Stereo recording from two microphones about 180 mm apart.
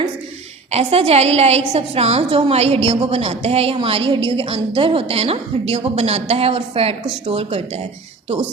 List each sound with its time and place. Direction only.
0.7 s a woman's voice: 35° right (ahead or behind)